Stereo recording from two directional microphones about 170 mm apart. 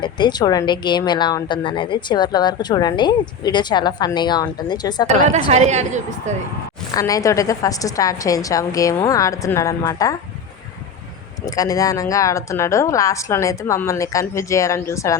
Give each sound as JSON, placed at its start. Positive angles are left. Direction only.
{"t": 0.0, "sound": "speech", "side_deg": 25}
{"t": 5.5, "sound": "a woman's voice", "side_deg": -40}
{"t": 6.9, "sound": "speech", "side_deg": 20}
{"t": 11.4, "sound": "speech", "side_deg": 20}